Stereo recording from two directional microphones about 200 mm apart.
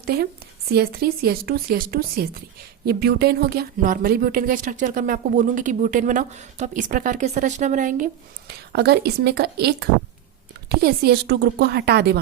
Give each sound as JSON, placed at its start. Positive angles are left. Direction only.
{"t": 0.0, "sound": "a woman's voice", "side_deg": -55}